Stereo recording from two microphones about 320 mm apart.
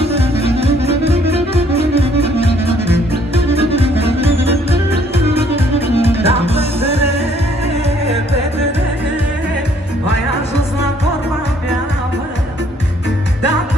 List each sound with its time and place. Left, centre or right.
0.0 s music: centre
3.5 s music: centre
5.9 s music: centre